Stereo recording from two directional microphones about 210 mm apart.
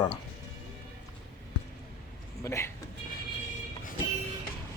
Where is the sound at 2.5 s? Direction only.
15° left (ahead or behind).